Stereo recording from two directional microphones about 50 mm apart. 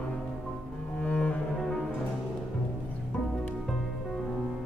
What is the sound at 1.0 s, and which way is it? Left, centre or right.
Cello, left.